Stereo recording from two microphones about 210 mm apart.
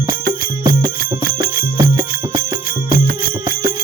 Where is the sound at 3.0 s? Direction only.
40° right (ahead or behind).